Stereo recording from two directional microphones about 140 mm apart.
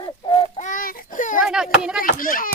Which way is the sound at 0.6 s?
70° left (ahead or behind).